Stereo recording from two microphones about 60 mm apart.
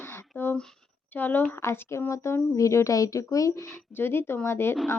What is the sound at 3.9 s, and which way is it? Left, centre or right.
Speech, left.